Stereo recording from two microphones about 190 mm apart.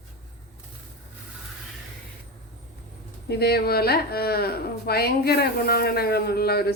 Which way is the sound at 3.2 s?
55° left (ahead or behind).